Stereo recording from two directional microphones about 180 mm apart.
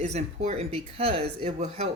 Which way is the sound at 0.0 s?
40° right (ahead or behind).